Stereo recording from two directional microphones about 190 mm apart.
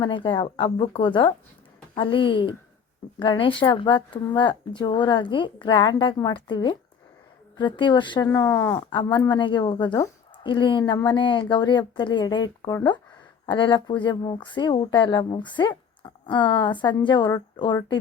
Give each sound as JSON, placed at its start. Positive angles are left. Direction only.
{"t": 0.0, "sound": "speech", "side_deg": 25}
{"t": 8.9, "sound": "speech", "side_deg": 25}